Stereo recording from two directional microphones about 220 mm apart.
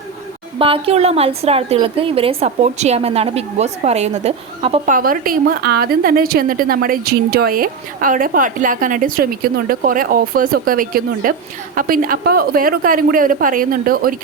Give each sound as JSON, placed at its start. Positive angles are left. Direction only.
{"t": 0.6, "sound": "a woman's voice", "side_deg": -25}
{"t": 4.9, "sound": "a woman's voice", "side_deg": -40}